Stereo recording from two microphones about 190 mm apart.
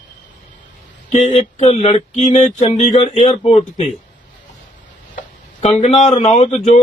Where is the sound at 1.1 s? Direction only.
35° left (ahead or behind).